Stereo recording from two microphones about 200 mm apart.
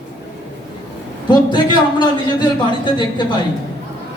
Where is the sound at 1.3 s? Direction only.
20° left (ahead or behind).